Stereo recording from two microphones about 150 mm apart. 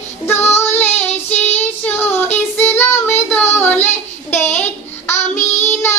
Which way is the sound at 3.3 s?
15° left (ahead or behind).